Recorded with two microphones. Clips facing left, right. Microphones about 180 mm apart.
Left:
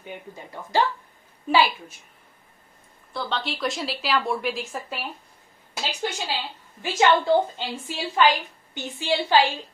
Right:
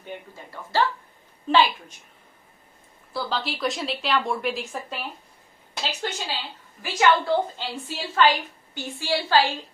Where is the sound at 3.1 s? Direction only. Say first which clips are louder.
Right 1 dB; centre (ahead or behind).